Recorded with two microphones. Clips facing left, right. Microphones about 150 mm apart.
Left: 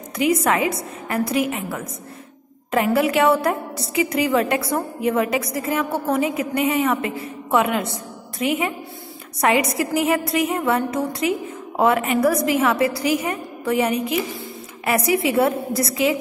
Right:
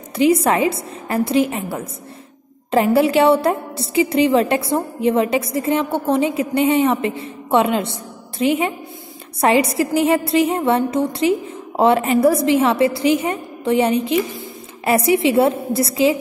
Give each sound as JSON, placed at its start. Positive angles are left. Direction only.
{"t": 0.2, "sound": "a woman's voice", "side_deg": -30}